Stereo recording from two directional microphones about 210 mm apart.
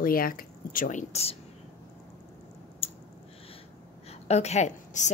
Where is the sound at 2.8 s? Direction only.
25° left (ahead or behind).